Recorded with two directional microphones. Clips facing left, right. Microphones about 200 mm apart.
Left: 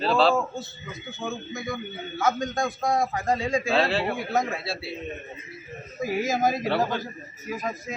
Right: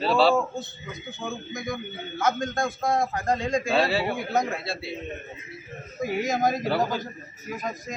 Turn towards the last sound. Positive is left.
turn(degrees=0)  # may be behind; listen again after turning